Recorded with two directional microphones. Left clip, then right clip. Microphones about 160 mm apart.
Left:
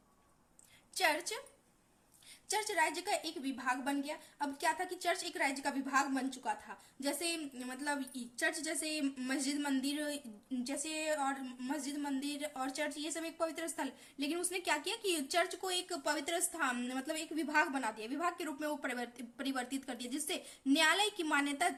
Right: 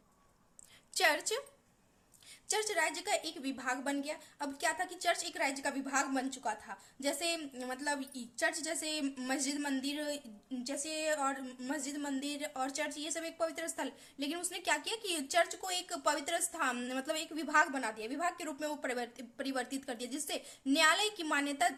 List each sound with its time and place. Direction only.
0.9 s a woman's voice: 30° right (ahead or behind)
2.5 s a woman's voice: 25° right (ahead or behind)